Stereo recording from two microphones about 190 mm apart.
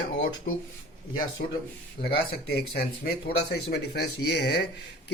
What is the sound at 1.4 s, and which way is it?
Speech, 50° left (ahead or behind).